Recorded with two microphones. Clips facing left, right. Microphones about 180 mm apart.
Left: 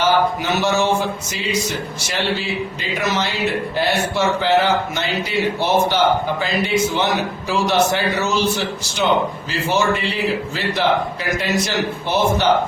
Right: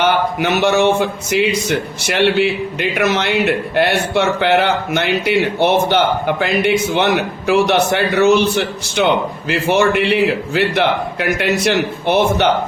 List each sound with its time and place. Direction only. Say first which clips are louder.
0.0 s speech: right 2 dB; 60° right (ahead or behind)